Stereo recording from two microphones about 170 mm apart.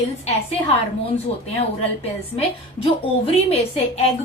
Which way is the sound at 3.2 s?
35° left (ahead or behind).